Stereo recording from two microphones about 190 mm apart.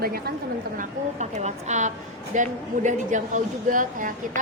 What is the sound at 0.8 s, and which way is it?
A woman's voice, 40° right (ahead or behind).